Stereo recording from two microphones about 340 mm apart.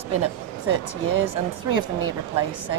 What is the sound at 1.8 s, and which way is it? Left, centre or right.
Speech, centre.